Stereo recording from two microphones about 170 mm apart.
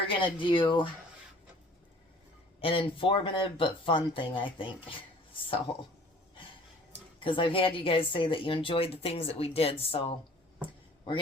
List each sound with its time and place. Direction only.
0.1 s speech: 30° left (ahead or behind)
2.6 s speech: 30° left (ahead or behind)
7.2 s speech: 30° left (ahead or behind)